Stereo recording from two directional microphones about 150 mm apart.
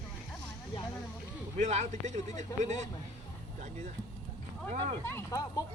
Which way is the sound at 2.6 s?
50° right (ahead or behind).